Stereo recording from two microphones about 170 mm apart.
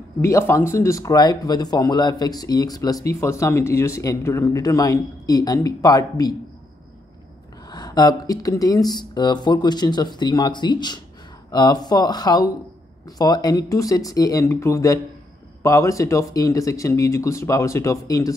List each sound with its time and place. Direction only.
0.2 s speech: 15° left (ahead or behind)
7.7 s speech: 25° left (ahead or behind)